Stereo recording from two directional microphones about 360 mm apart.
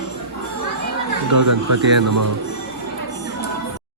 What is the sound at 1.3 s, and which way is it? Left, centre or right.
Speech, right.